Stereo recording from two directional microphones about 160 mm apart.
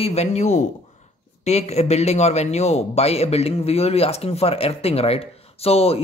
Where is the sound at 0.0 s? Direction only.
40° left (ahead or behind).